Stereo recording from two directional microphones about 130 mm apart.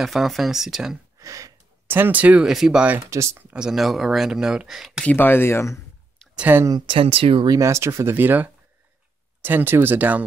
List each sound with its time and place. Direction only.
0.0 s speech: centre (ahead or behind)
1.2 s a sound: 25° right (ahead or behind)
1.9 s speech: 15° right (ahead or behind)
3.1 s speech: 20° right (ahead or behind)
3.5 s speech: 5° right (ahead or behind)
5.0 s speech: 15° left (ahead or behind)
6.3 s speech: 10° right (ahead or behind)
6.9 s speech: 45° right (ahead or behind)
7.4 s speech: 25° right (ahead or behind)